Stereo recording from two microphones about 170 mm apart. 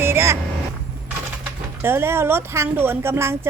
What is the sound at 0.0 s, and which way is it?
Vehicle, 15° right (ahead or behind).